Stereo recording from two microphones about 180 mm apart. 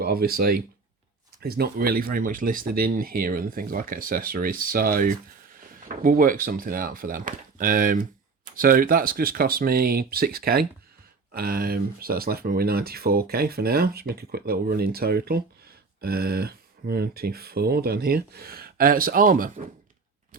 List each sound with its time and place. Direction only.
0.0 s speech: 55° right (ahead or behind)